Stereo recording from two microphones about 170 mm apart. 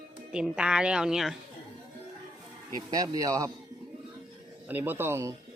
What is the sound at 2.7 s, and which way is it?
Speech, 20° right (ahead or behind).